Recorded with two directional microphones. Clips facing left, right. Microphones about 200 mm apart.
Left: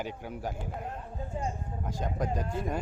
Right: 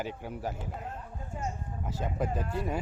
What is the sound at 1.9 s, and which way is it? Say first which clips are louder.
Speech: even; 5° right (ahead or behind).